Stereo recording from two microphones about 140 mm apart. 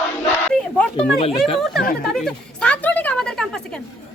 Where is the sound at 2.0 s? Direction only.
Centre (ahead or behind).